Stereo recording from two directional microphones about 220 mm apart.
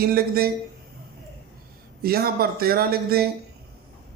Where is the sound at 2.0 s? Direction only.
45° right (ahead or behind).